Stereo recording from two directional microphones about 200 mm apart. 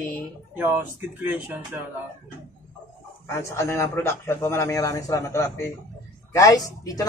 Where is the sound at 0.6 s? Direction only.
10° right (ahead or behind).